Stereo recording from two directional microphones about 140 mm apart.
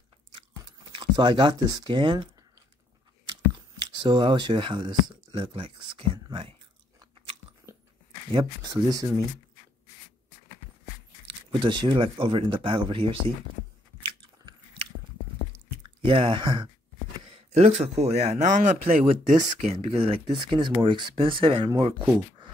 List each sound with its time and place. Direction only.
0.4 s chewing: 40° right (ahead or behind)
3.8 s speech: 30° right (ahead or behind)
8.3 s speech: 30° right (ahead or behind)
11.2 s speech: 35° right (ahead or behind)
14.0 s biting: 40° right (ahead or behind)
15.8 s speech: 35° right (ahead or behind)
17.5 s speech: 50° right (ahead or behind)
19.7 s speech: 45° right (ahead or behind)